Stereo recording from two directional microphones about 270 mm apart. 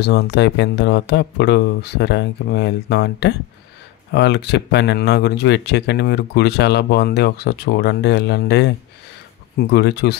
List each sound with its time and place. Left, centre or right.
0.0 s speech: left